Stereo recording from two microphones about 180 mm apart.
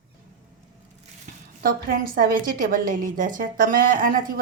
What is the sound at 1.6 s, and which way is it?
A woman's voice, 55° right (ahead or behind).